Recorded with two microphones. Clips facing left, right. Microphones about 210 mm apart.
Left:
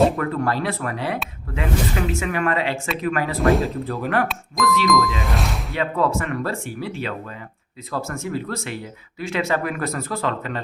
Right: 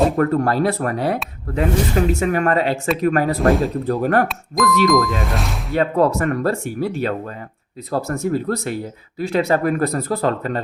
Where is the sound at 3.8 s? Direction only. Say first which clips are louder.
Right 5 dB; 40° right (ahead or behind).